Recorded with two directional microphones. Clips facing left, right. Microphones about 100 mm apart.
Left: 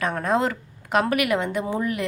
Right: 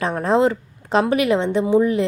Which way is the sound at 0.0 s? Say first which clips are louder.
Right 5 dB; 30° right (ahead or behind).